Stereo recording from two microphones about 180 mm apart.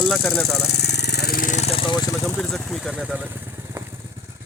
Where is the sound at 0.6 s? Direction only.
65° left (ahead or behind); by 2.3 s 20° left (ahead or behind).